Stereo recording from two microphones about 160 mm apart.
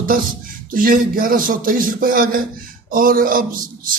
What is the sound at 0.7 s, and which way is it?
A man's voice, 60° right (ahead or behind).